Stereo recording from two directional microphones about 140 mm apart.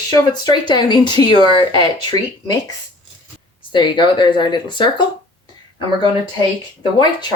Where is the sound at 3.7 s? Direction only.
35° left (ahead or behind).